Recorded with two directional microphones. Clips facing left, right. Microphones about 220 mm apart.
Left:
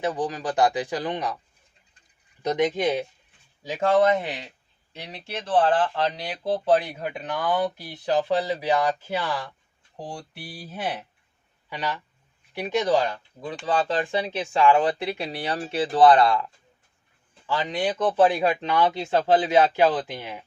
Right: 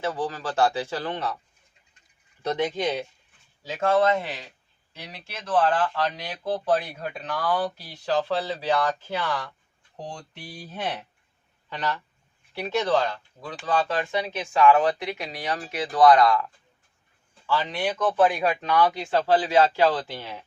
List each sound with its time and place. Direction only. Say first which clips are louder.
0.0 s speech: left 2 dB; 15° left (ahead or behind)
2.4 s speech: left 3 dB; 15° left (ahead or behind)
13.7 s speech: left 1 dB; 30° left (ahead or behind)
17.4 s speech: left 1 dB; 20° left (ahead or behind)
18.0 s speech: left 1 dB; 30° left (ahead or behind)